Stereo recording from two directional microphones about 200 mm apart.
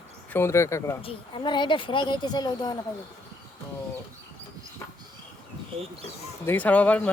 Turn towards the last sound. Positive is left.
turn(degrees=5)  # may be behind; listen again after turning